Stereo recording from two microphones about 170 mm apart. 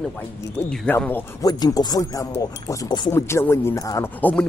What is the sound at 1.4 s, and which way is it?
Speech, 20° left (ahead or behind).